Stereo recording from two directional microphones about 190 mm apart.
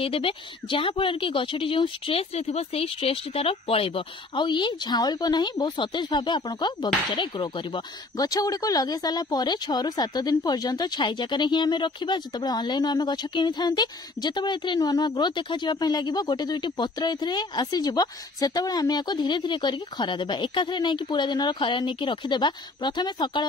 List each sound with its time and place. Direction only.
0.0 s speech: 30° left (ahead or behind)